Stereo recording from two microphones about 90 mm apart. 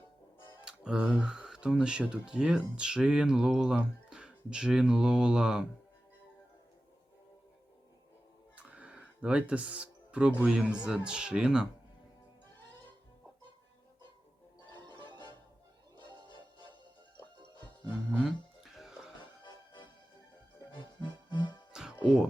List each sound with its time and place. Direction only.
0.9 s speech: 15° right (ahead or behind)
8.5 s music: 15° right (ahead or behind)
10.4 s speech: 10° right (ahead or behind)
18.2 s music: 5° right (ahead or behind)
19.2 s music: 60° left (ahead or behind)
21.7 s music: 5° right (ahead or behind)